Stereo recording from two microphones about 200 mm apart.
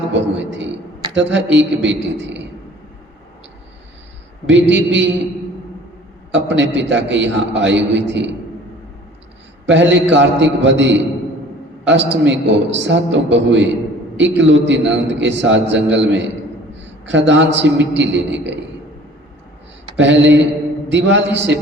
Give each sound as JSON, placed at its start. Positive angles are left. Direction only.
{"t": 0.1, "sound": "a man's voice", "side_deg": -65}
{"t": 4.4, "sound": "a man's voice", "side_deg": -65}
{"t": 6.3, "sound": "a man's voice", "side_deg": -65}
{"t": 9.6, "sound": "a man's voice", "side_deg": -65}
{"t": 20.0, "sound": "a man's voice", "side_deg": -65}